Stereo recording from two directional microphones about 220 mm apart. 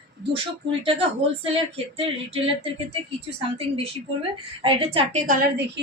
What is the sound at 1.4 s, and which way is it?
Speech, 25° right (ahead or behind).